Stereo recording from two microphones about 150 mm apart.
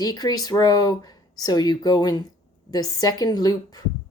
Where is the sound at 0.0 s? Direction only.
25° left (ahead or behind).